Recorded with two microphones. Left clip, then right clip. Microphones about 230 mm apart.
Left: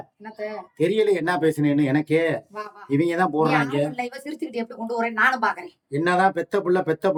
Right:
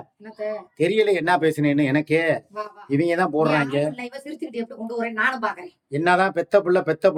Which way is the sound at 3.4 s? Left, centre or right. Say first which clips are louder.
Right 1 dB; left.